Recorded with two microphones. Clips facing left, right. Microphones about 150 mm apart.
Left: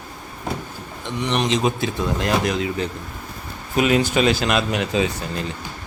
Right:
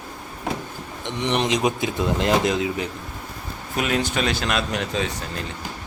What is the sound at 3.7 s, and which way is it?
Speech, 5° left (ahead or behind).